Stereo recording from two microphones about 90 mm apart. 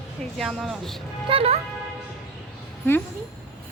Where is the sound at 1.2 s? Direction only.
90° right.